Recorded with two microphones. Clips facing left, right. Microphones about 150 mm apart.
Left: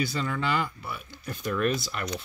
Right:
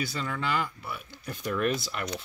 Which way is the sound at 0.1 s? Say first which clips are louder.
Left 2 dB; centre (ahead or behind).